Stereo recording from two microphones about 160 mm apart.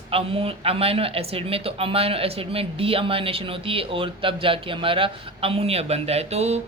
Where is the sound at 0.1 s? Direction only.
35° right (ahead or behind).